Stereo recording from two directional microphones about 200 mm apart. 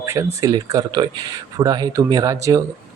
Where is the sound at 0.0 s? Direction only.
15° right (ahead or behind).